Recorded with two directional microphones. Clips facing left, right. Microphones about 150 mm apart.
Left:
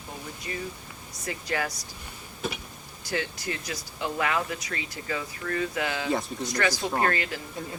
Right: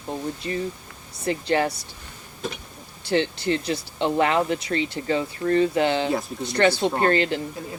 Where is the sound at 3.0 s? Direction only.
30° right (ahead or behind).